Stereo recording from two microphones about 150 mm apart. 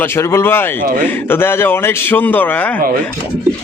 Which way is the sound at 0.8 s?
60° right (ahead or behind).